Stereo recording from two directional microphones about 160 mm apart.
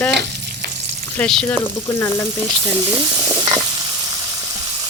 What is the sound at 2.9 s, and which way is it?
Stir, 20° right (ahead or behind).